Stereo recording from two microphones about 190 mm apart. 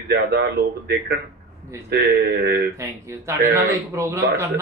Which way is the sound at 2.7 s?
15° right (ahead or behind).